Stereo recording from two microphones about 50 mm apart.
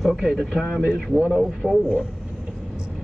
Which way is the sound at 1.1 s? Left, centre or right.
Centre.